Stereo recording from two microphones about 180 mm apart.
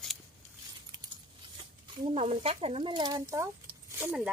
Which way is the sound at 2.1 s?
30° right (ahead or behind).